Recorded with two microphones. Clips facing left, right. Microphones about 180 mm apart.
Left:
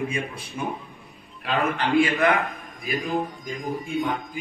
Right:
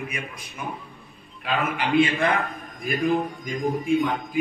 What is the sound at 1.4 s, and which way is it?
Speech, centre (ahead or behind).